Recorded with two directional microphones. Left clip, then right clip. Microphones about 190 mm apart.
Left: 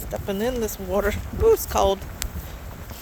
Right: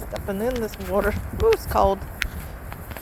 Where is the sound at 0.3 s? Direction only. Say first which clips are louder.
Even; 20° left (ahead or behind).